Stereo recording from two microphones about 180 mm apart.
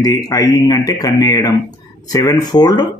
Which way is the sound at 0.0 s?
20° left (ahead or behind).